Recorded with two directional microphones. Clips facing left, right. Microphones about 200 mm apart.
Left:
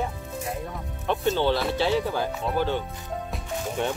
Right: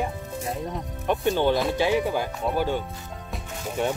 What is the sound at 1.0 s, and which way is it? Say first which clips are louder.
Speech: right 1 dB; 15° right (ahead or behind).